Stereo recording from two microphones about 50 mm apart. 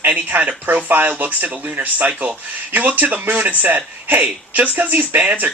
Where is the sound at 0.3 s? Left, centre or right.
Right.